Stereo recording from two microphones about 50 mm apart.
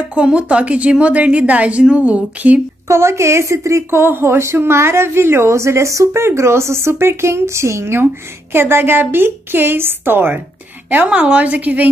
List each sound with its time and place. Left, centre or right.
0.1 s a woman's voice: right
2.9 s a woman's voice: right
4.0 s a woman's voice: right
6.2 s a woman's voice: right
11.1 s a woman's voice: right